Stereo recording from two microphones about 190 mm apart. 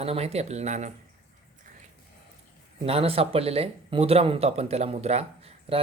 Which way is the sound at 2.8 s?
30° right (ahead or behind).